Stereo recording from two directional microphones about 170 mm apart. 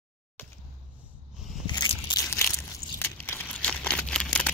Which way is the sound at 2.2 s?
10° left (ahead or behind).